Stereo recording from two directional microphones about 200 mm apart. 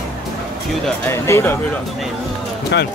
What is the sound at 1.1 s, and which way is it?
Speech, 10° left (ahead or behind).